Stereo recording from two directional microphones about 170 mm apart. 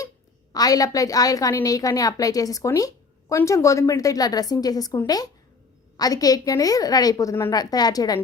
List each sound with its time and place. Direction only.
0.5 s a woman's voice: 20° left (ahead or behind)